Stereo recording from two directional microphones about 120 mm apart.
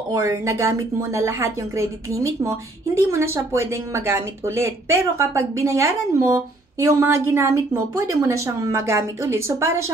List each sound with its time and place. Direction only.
0.1 s a woman's voice: 25° right (ahead or behind)